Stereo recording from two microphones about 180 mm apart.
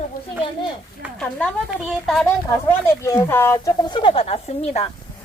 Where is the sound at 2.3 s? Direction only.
15° left (ahead or behind); by 4.9 s 35° left (ahead or behind).